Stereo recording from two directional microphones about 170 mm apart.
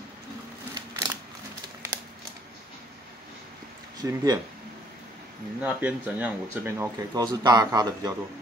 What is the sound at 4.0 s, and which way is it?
Speech, 25° right (ahead or behind).